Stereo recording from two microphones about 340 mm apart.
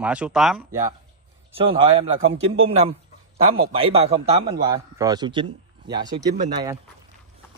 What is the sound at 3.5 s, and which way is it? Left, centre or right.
A man's voice, centre.